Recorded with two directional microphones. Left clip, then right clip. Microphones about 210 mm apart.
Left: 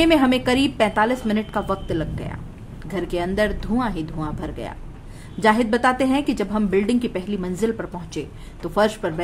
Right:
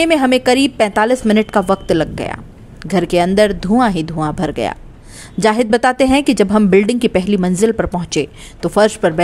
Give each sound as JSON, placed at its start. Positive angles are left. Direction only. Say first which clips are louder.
{"t": 0.0, "sound": "a woman's voice", "louder": "right 5 dB", "side_deg": -35}